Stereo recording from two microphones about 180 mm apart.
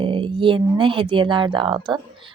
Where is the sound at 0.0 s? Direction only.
30° right (ahead or behind).